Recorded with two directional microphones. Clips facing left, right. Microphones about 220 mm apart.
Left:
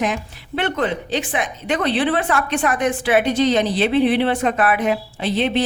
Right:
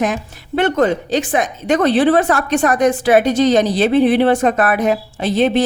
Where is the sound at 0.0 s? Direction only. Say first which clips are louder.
Right 3 dB; 45° right (ahead or behind).